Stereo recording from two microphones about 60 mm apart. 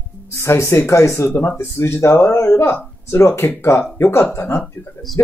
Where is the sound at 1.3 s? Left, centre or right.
Left.